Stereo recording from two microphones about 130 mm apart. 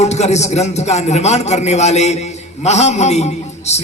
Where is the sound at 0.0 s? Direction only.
60° left (ahead or behind).